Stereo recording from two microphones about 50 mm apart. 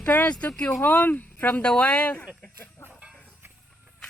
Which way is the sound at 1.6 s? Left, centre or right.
Left.